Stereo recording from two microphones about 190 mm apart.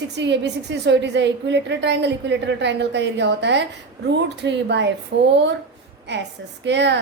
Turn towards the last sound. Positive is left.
turn(degrees=-65)  # may be behind; listen again after turning